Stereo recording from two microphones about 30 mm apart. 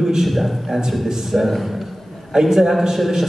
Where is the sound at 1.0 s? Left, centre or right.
Centre.